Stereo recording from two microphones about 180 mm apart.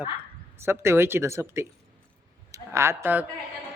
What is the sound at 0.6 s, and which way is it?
A man's voice, 15° right (ahead or behind).